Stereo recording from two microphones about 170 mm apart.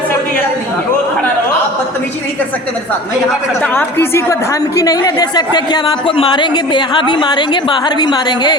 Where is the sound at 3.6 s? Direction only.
10° left (ahead or behind).